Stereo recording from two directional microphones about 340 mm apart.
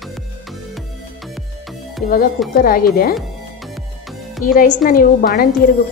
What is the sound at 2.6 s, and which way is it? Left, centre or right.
Speech, left.